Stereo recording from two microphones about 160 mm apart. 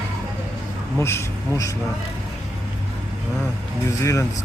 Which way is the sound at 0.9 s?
15° left (ahead or behind).